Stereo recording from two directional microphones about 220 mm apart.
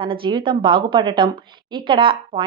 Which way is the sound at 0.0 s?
25° right (ahead or behind).